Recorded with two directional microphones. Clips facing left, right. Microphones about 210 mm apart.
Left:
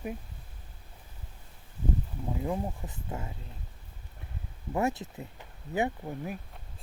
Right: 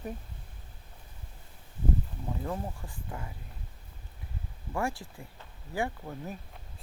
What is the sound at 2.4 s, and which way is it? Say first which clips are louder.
Speech: left 4 dB; 15° left (ahead or behind).